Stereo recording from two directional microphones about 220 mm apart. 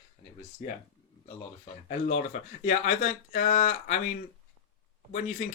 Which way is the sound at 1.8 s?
35° left (ahead or behind).